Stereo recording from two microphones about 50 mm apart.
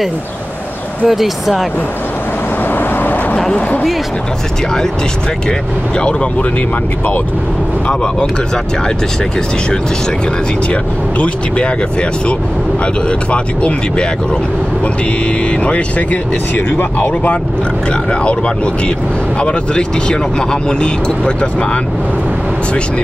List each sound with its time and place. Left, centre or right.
1.0 s speech: centre
2.7 s vehicle: left
10.7 s speech: left
15.6 s speech: left
19.4 s speech: centre